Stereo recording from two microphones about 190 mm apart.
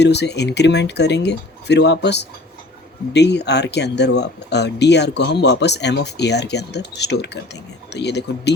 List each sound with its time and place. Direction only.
0.0 s speech: 65° left (ahead or behind)